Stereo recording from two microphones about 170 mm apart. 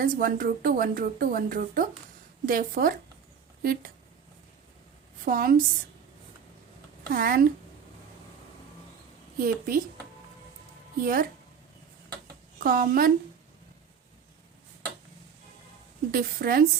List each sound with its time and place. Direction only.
0.0 s speech: 55° right (ahead or behind)
5.2 s speech: 55° right (ahead or behind)
7.0 s speech: 60° right (ahead or behind)
9.4 s speech: 55° right (ahead or behind)
11.0 s speech: 60° right (ahead or behind)
12.6 s speech: 60° right (ahead or behind)
16.1 s speech: 60° right (ahead or behind)